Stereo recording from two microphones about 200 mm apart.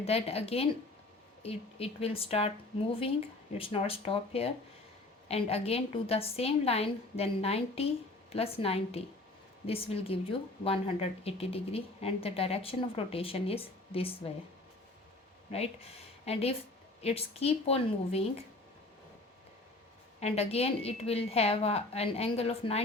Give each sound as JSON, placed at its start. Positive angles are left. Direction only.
{"t": 0.0, "sound": "speech", "side_deg": 30}
{"t": 3.6, "sound": "a woman's voice", "side_deg": 30}
{"t": 15.5, "sound": "a woman's voice", "side_deg": 30}
{"t": 20.1, "sound": "a woman's voice", "side_deg": 30}